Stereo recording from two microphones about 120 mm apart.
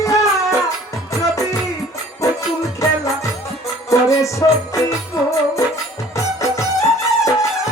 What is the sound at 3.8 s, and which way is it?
Music, 25° left (ahead or behind).